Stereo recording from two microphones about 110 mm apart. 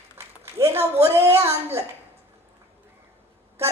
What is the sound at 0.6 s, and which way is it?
Speech, 35° right (ahead or behind).